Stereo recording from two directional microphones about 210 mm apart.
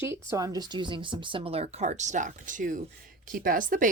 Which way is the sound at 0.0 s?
15° right (ahead or behind).